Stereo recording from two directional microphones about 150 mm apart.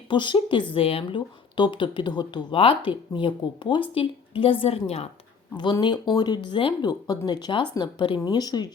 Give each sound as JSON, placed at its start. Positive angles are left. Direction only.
{"t": 0.1, "sound": "speech", "side_deg": 30}
{"t": 5.5, "sound": "speech", "side_deg": 30}